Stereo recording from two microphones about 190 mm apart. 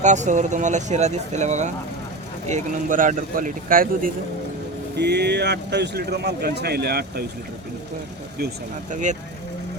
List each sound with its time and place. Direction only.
0.0 s speech: 40° right (ahead or behind)
4.9 s speech: 60° right (ahead or behind)
8.9 s speech: 40° right (ahead or behind)